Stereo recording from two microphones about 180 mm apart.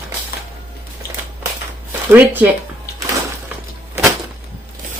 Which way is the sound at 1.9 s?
10° right (ahead or behind).